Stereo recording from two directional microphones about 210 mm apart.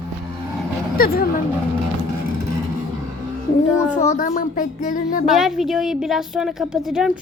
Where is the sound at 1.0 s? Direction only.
45° left (ahead or behind).